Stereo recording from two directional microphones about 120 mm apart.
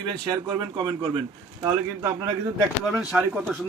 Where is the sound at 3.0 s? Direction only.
5° right (ahead or behind).